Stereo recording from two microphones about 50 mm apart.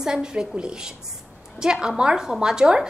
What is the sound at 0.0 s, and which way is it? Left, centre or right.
A woman's voice, centre.